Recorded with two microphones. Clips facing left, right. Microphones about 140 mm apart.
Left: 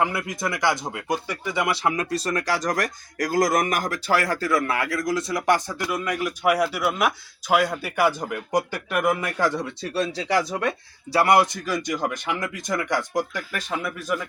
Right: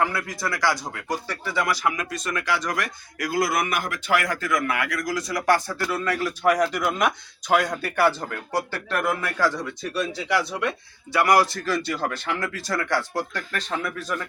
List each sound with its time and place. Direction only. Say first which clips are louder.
0.0 s speech: left 1 dB; 20° left (ahead or behind)
10.3 s speech: left 1 dB; 40° left (ahead or behind); by 14.3 s 10° left (ahead or behind)